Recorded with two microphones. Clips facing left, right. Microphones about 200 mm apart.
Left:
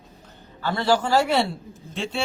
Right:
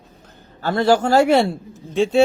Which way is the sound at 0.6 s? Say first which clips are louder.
Right 5 dB; 45° right (ahead or behind).